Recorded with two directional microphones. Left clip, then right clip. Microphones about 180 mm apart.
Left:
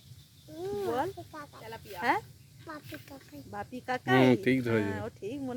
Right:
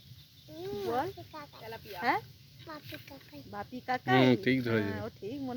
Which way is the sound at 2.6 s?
50° left (ahead or behind).